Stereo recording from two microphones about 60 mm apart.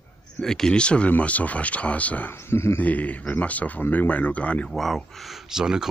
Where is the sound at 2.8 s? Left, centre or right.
Left.